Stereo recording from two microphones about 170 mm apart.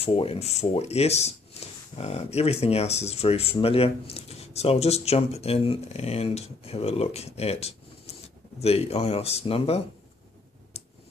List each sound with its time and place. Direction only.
0.0 s speech: 35° left (ahead or behind)